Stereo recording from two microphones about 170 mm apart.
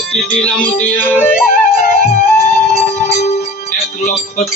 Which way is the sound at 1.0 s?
10° left (ahead or behind).